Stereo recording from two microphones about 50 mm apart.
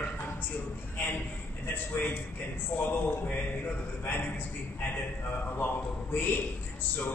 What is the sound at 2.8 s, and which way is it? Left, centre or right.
A man's voice, left.